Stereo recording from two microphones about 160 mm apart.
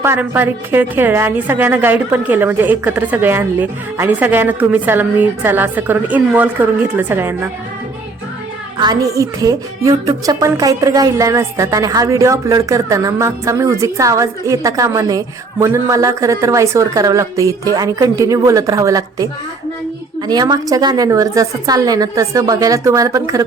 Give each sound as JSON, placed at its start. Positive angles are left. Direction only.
{"t": 0.0, "sound": "a woman's voice", "side_deg": -15}
{"t": 8.8, "sound": "a woman's voice", "side_deg": -25}